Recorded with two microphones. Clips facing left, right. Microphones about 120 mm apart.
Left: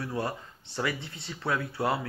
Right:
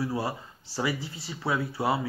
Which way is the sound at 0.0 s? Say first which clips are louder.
Right 2 dB; 10° right (ahead or behind).